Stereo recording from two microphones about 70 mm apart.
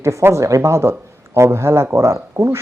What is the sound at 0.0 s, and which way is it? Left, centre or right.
Speech, right.